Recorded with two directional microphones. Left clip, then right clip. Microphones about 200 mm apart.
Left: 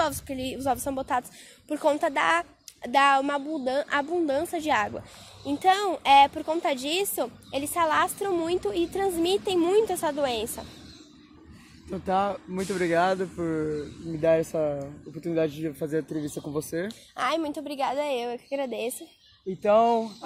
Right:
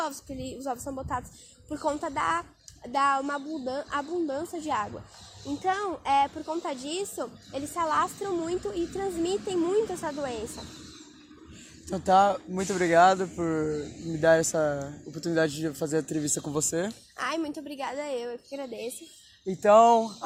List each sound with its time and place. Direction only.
0.0 s a woman's voice: 40° left (ahead or behind)
11.9 s speech: centre (ahead or behind)
12.5 s speech: 15° left (ahead or behind)
14.2 s speech: 5° right (ahead or behind)
15.6 s speech: centre (ahead or behind)
16.0 s speech: 10° right (ahead or behind)
16.9 s speech: 45° left (ahead or behind)
19.6 s speech: 10° left (ahead or behind)